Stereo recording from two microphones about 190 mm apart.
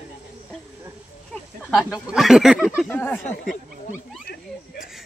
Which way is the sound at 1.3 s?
5° left (ahead or behind).